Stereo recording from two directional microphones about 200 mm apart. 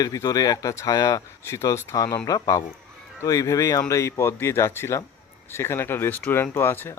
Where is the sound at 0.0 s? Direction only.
20° left (ahead or behind).